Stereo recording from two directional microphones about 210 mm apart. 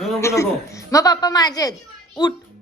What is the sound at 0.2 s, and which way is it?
A woman's voice, 15° left (ahead or behind).